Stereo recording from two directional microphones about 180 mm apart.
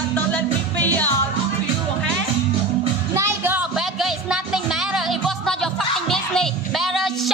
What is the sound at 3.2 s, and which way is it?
Music, 10° right (ahead or behind).